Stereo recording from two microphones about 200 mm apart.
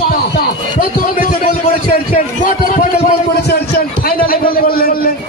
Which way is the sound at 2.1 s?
40° left (ahead or behind).